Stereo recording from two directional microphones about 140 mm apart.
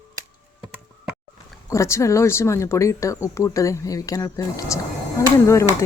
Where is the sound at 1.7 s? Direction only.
20° left (ahead or behind).